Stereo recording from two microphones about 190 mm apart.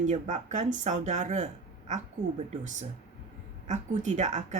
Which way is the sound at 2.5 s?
40° right (ahead or behind).